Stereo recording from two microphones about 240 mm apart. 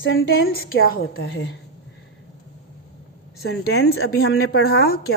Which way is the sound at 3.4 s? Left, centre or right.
Left.